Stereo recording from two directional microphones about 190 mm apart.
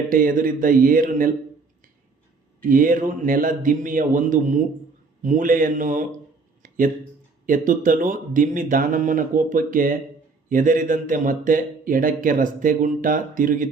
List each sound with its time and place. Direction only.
0.1 s a man's voice: 45° right (ahead or behind)
2.6 s a man's voice: 45° right (ahead or behind)
6.6 s a sound: 45° right (ahead or behind)
7.4 s a man's voice: 45° right (ahead or behind)